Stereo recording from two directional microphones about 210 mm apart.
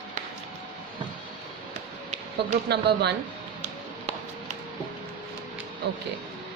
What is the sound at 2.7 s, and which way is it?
Speech, 50° right (ahead or behind).